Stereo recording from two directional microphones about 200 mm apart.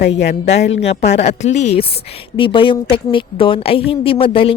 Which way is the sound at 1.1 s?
35° left (ahead or behind).